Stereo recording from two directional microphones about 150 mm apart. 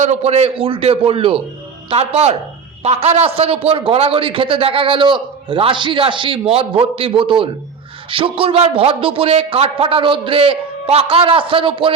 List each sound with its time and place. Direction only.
0.0 s a man's voice: 45° right (ahead or behind)